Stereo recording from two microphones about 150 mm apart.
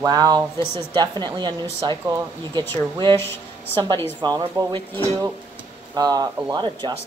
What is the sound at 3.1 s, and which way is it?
Speech, 15° left (ahead or behind).